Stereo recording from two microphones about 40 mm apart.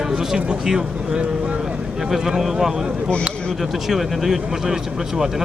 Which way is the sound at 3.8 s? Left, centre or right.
Centre.